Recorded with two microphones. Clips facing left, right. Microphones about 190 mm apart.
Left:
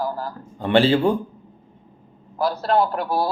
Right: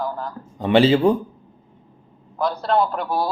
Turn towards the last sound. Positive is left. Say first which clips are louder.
# even
turn(degrees=5)  # may be behind; listen again after turning